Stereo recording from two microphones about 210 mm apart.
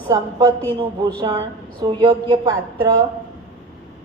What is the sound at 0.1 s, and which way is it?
Speech, 20° right (ahead or behind).